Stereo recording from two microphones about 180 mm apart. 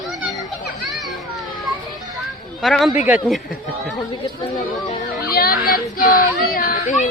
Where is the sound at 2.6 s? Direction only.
Centre (ahead or behind).